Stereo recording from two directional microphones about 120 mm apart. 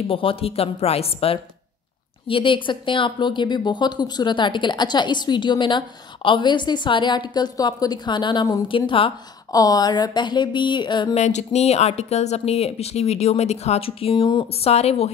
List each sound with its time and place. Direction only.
0.1 s a woman's voice: 50° left (ahead or behind)
8.6 s a woman's voice: 45° left (ahead or behind)
9.5 s speech: 30° left (ahead or behind)
11.1 s speech: 70° left (ahead or behind); by 14.5 s 40° left (ahead or behind)
14.6 s speech: 60° left (ahead or behind)